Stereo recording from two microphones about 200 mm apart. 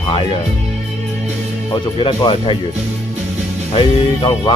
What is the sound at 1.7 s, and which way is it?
Speech, 25° left (ahead or behind).